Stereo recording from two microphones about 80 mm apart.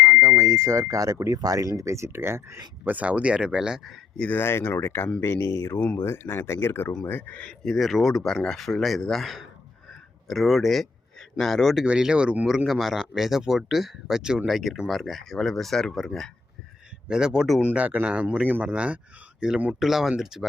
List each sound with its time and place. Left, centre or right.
0.0 s a sound: right
1.2 s speech: right
2.8 s speech: centre
4.4 s speech: left
7.6 s speech: centre
11.9 s speech: centre
17.1 s speech: centre
17.6 s speech: centre